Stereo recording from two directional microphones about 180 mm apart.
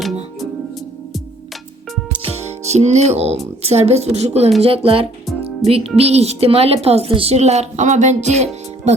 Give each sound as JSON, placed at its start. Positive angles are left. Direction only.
{"t": 2.6, "sound": "speech", "side_deg": -40}
{"t": 5.6, "sound": "music", "side_deg": 0}
{"t": 6.0, "sound": "speech", "side_deg": -35}